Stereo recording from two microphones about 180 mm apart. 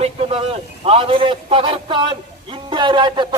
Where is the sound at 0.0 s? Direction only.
30° right (ahead or behind).